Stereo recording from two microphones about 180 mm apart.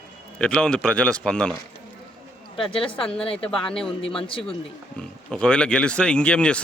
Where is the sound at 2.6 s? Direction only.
30° left (ahead or behind).